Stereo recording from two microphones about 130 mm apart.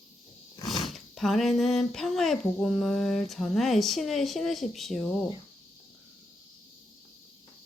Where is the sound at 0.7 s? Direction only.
Centre (ahead or behind).